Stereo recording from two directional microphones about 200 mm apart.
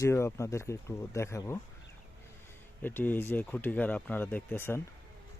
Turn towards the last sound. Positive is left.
turn(degrees=10)  # may be behind; listen again after turning